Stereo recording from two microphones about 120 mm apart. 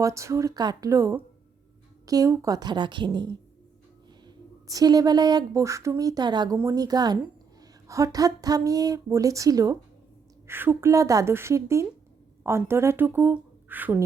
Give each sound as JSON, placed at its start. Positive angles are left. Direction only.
{"t": 0.0, "sound": "a woman's voice", "side_deg": -25}
{"t": 4.7, "sound": "a woman's voice", "side_deg": -30}
{"t": 10.4, "sound": "speech", "side_deg": -20}